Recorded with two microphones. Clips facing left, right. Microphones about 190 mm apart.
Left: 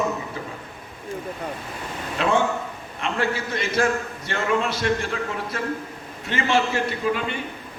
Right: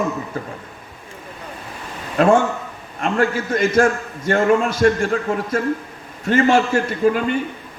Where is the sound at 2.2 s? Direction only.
45° right (ahead or behind).